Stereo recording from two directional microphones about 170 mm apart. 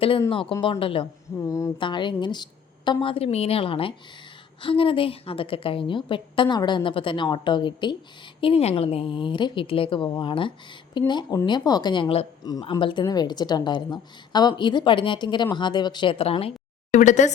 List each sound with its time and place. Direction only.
0.3 s a woman's voice: 30° left (ahead or behind)
1.4 s a woman's voice: 20° left (ahead or behind); by 17.3 s 45° left (ahead or behind)